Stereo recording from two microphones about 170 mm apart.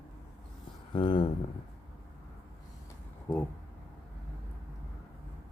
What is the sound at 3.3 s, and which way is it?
Speech, 15° left (ahead or behind).